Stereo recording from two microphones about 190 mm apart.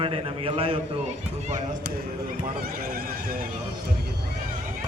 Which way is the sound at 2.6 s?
50° right (ahead or behind).